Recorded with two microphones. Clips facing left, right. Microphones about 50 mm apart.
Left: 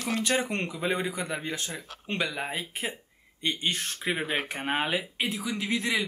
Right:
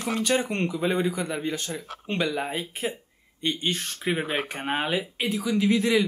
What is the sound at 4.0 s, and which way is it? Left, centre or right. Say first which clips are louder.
Speech: right 4 dB; centre.